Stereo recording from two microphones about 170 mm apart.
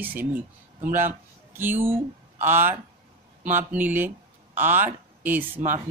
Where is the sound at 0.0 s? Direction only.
10° right (ahead or behind).